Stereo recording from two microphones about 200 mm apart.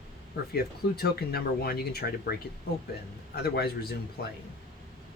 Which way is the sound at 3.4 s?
55° left (ahead or behind).